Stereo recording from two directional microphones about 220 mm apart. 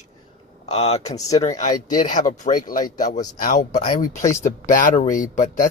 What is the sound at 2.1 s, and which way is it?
Speech, 35° left (ahead or behind).